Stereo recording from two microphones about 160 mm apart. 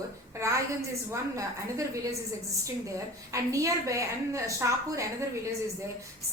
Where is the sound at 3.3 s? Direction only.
20° right (ahead or behind).